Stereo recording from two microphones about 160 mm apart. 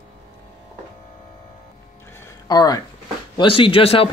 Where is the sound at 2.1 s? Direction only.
20° left (ahead or behind).